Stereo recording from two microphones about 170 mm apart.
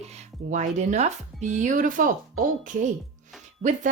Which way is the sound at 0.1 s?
45° right (ahead or behind).